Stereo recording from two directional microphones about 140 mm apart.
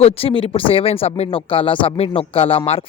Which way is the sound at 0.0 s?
45° left (ahead or behind).